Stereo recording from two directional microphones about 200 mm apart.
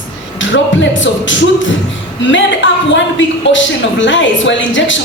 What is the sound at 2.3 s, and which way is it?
A woman's voice, 65° left (ahead or behind).